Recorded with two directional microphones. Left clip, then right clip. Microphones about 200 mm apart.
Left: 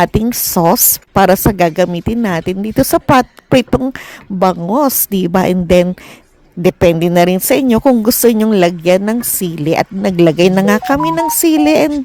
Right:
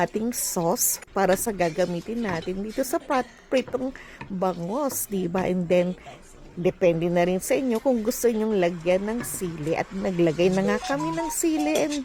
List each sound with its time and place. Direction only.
0.0 s a woman's voice: 40° left (ahead or behind)